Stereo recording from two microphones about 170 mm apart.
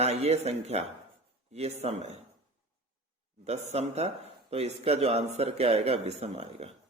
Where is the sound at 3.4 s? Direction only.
40° right (ahead or behind).